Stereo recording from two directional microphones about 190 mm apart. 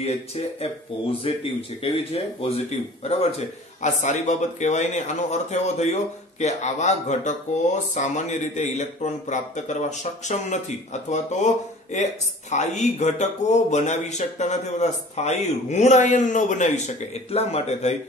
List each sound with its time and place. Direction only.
0.0 s a man's voice: 35° left (ahead or behind)